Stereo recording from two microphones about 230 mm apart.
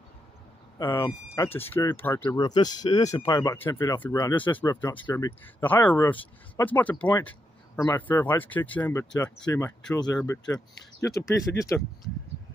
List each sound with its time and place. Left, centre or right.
0.7 s speech: centre